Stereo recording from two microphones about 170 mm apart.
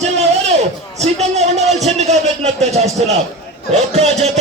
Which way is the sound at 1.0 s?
40° right (ahead or behind).